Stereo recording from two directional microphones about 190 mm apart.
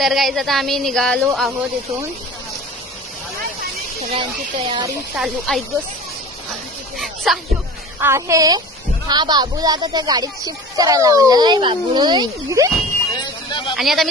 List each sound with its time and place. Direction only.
0.0 s speech: centre (ahead or behind)
4.1 s speech: 25° right (ahead or behind)
5.1 s speech: centre (ahead or behind)
7.3 s speech: centre (ahead or behind)
8.0 s speech: 15° right (ahead or behind)
13.5 s a sound: 25° left (ahead or behind)
13.7 s speech: centre (ahead or behind)